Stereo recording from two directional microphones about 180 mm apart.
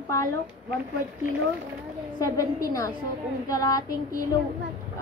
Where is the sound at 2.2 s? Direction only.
20° left (ahead or behind).